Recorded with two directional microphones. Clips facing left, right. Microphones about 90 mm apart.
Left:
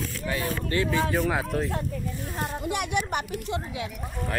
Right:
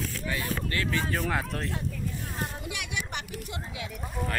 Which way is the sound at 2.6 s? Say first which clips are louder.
Left 8 dB; 50° left (ahead or behind).